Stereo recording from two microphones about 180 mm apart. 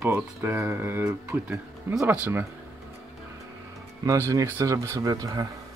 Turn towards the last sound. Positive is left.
turn(degrees=-20)  # may be behind; listen again after turning